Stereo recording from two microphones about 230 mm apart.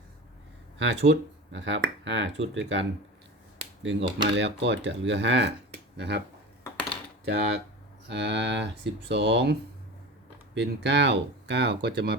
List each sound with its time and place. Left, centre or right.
0.8 s speech: right
4.4 s speech: right
7.3 s speech: right